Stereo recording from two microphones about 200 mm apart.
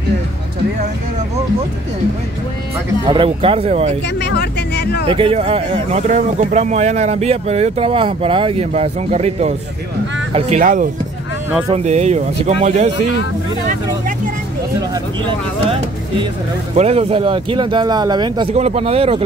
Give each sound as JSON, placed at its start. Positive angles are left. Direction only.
{"t": 3.1, "sound": "speech", "side_deg": -25}
{"t": 4.2, "sound": "speech", "side_deg": 60}
{"t": 5.0, "sound": "speech", "side_deg": -25}
{"t": 16.7, "sound": "speech", "side_deg": -30}